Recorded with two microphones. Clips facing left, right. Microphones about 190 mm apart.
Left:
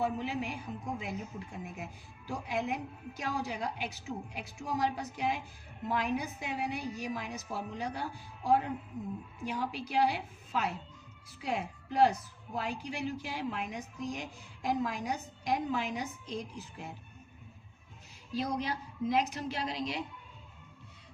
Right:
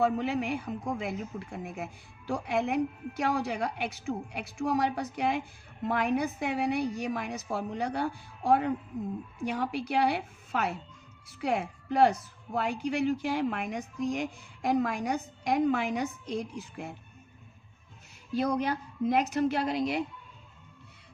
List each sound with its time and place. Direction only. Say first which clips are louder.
0.0 s a woman's voice: right 6 dB; 65° right (ahead or behind)
18.3 s a woman's voice: right 6 dB; 60° right (ahead or behind)